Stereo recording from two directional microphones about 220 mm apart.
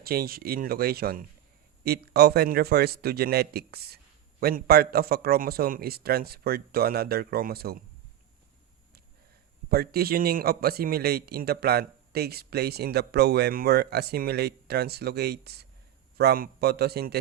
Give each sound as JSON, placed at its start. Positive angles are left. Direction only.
{"t": 0.0, "sound": "a man's voice", "side_deg": -45}
{"t": 9.6, "sound": "a man's voice", "side_deg": -45}